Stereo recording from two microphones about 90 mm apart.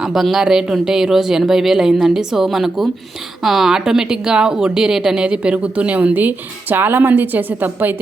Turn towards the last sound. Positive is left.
turn(degrees=-20)  # may be behind; listen again after turning